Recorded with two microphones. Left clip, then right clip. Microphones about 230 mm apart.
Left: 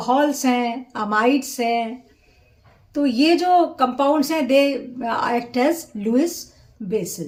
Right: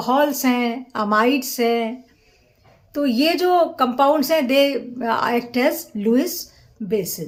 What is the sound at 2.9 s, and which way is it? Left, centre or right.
Speech, centre.